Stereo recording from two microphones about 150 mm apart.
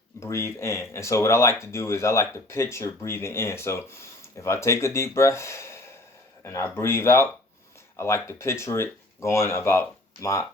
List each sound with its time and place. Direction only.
0.2 s speech: 20° left (ahead or behind)